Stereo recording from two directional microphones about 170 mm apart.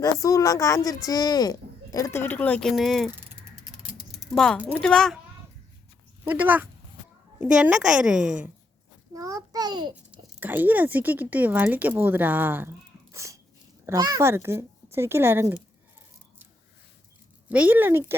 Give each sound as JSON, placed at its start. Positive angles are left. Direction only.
{"t": 0.0, "sound": "speech", "side_deg": 20}
{"t": 4.3, "sound": "a woman's voice", "side_deg": 5}
{"t": 6.2, "sound": "a woman's voice", "side_deg": -10}
{"t": 9.1, "sound": "a sound", "side_deg": -20}
{"t": 9.9, "sound": "speech", "side_deg": -10}
{"t": 13.1, "sound": "sneeze", "side_deg": -20}
{"t": 13.8, "sound": "speech", "side_deg": -20}
{"t": 17.5, "sound": "speech", "side_deg": -10}